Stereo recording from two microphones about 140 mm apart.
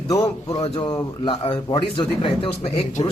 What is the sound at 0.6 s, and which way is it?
Speech, 35° left (ahead or behind).